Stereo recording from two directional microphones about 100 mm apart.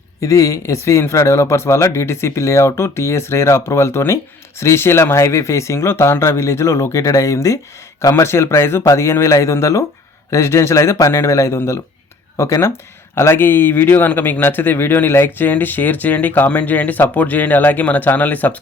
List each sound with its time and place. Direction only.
0.2 s speech: 35° left (ahead or behind); by 18.5 s 15° left (ahead or behind)